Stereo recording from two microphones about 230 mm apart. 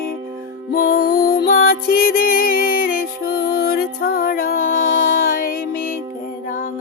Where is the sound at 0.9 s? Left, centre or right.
Left.